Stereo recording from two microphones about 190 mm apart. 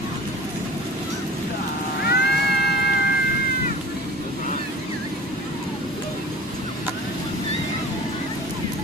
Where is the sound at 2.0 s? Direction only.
60° left (ahead or behind).